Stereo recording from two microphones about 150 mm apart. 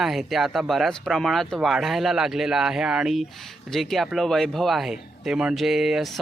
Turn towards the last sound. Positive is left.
turn(degrees=0)  # may be behind; listen again after turning